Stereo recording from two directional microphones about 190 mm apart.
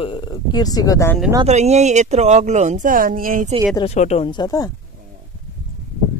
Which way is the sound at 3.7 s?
30° left (ahead or behind).